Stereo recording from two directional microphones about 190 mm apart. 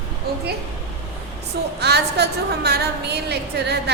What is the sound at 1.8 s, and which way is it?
A woman's voice, 60° right (ahead or behind).